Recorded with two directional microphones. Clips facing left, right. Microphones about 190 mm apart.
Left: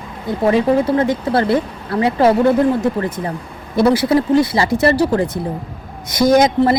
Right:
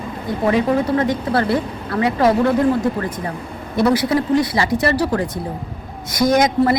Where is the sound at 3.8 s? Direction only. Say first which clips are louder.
Left 3 dB; 30° left (ahead or behind).